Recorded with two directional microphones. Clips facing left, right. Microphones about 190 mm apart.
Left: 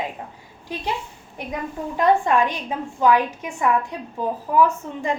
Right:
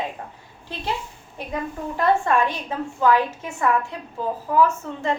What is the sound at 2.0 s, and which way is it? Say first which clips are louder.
A woman's voice: left 2 dB; 15° left (ahead or behind).